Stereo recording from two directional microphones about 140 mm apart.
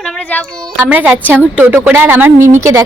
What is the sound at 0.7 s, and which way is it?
A woman's voice, 10° right (ahead or behind).